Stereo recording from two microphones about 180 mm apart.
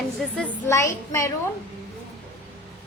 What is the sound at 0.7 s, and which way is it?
Speech, 15° left (ahead or behind).